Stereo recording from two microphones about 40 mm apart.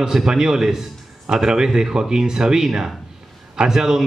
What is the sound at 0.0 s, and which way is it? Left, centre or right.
A man's voice, centre.